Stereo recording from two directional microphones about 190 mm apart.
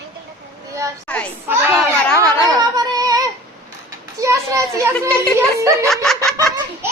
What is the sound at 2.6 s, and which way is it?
Female singing, 20° right (ahead or behind).